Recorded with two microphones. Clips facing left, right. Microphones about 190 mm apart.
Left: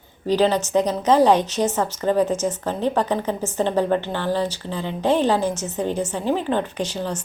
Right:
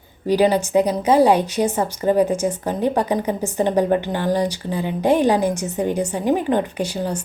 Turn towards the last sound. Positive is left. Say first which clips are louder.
# right 2 dB
turn(degrees=-10)  # may be behind; listen again after turning